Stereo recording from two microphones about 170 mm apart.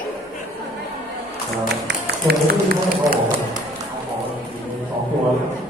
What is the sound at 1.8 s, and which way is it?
Run, 70° right (ahead or behind).